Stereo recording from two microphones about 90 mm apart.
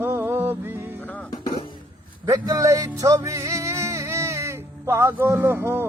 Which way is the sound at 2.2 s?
40° right (ahead or behind).